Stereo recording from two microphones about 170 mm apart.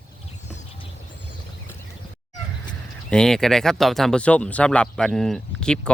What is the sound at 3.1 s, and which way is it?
Speech, 5° left (ahead or behind).